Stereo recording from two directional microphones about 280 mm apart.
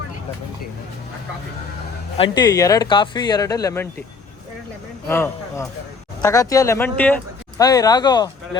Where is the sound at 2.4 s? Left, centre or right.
Centre.